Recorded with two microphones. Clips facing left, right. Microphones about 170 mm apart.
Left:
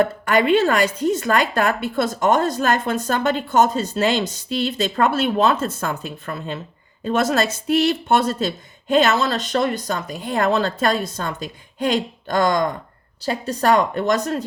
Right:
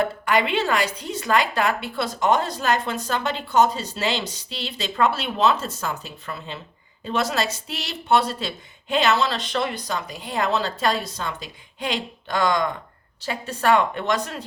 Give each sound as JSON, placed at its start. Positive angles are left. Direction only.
{"t": 0.0, "sound": "a woman's voice", "side_deg": 45}